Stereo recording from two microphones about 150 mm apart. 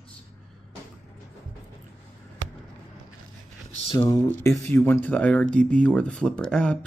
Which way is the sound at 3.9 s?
30° left (ahead or behind).